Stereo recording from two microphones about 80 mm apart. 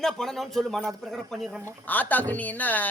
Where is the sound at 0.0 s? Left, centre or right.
Centre.